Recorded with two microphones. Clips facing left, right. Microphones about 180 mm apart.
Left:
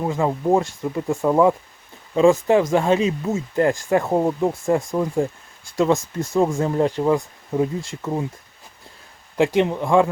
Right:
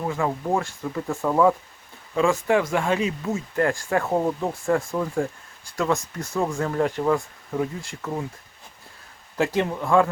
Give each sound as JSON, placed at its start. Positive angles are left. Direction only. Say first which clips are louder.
{"t": 0.0, "sound": "speech", "louder": "left 4 dB", "side_deg": 20}
{"t": 9.4, "sound": "speech", "louder": "left 5 dB", "side_deg": 20}